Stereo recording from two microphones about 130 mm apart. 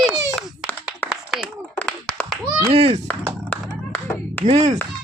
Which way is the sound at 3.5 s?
10° left (ahead or behind).